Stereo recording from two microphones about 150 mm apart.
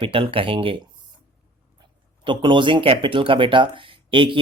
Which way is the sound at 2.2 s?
30° right (ahead or behind).